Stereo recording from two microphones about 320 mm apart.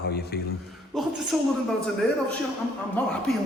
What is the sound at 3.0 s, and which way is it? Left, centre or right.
Speech, centre.